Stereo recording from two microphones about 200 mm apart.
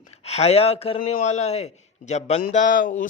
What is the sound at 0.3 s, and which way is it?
A man's voice, 30° left (ahead or behind).